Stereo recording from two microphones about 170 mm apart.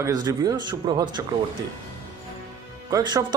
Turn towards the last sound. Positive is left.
turn(degrees=-20)  # may be behind; listen again after turning